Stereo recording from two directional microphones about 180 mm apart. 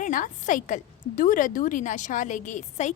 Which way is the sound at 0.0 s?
45° left (ahead or behind).